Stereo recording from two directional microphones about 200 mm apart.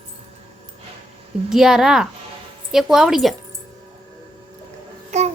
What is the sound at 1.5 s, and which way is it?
Speech, centre (ahead or behind).